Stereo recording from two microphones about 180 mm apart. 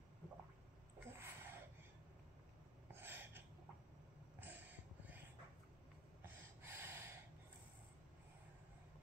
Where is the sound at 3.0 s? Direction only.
10° right (ahead or behind).